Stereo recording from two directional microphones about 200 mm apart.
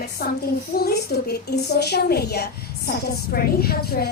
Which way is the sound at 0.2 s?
50° left (ahead or behind).